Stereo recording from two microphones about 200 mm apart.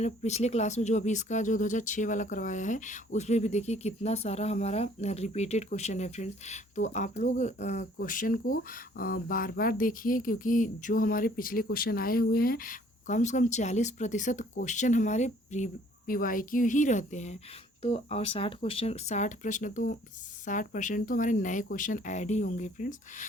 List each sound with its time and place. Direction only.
0.0 s speech: 35° left (ahead or behind)